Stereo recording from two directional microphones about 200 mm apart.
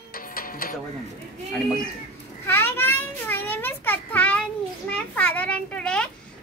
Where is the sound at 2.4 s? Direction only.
10° left (ahead or behind).